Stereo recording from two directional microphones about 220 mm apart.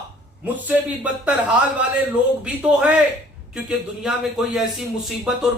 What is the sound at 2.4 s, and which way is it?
A man's voice, 5° right (ahead or behind).